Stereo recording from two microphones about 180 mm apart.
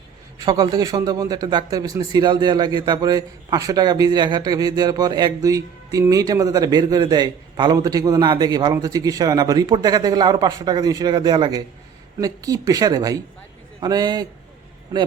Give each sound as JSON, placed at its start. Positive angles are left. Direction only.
{"t": 0.3, "sound": "speech", "side_deg": -20}